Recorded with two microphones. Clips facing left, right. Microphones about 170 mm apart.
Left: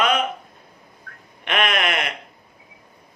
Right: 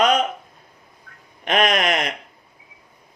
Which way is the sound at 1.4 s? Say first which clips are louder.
Right 3 dB; 40° right (ahead or behind).